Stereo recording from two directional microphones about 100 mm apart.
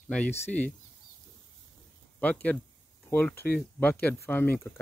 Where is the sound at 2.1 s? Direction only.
15° left (ahead or behind).